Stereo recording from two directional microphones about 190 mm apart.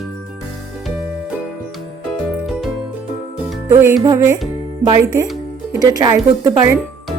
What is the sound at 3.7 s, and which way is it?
Music, 10° right (ahead or behind).